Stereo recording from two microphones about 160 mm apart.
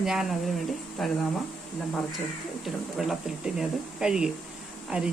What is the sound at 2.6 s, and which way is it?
Speech, centre (ahead or behind).